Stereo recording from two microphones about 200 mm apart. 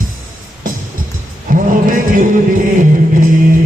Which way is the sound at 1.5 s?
40° right (ahead or behind).